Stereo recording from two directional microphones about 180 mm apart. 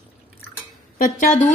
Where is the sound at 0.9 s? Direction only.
50° left (ahead or behind).